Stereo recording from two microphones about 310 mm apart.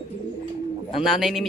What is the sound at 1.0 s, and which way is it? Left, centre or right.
Speech, centre.